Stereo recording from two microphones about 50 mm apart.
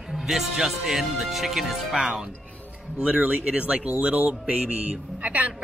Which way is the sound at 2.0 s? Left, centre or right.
Right.